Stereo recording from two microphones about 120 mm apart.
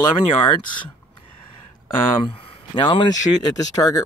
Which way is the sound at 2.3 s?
50° left (ahead or behind).